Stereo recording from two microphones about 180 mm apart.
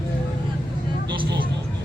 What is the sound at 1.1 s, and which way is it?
Vehicle, 25° right (ahead or behind).